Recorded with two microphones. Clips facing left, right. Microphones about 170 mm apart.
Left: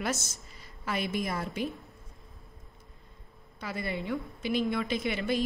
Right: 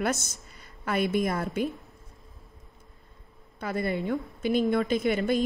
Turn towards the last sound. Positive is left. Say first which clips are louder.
# right 5 dB
turn(degrees=-50)  # may be behind; listen again after turning